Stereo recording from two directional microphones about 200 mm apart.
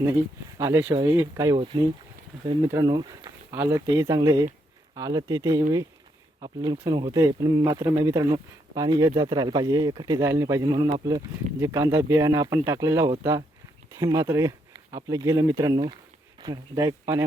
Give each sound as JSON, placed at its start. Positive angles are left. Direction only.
{"t": 0.6, "sound": "speech", "side_deg": -15}